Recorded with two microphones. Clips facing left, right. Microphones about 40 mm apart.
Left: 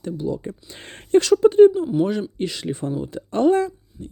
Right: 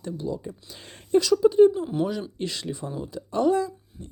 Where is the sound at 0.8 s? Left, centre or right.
Left.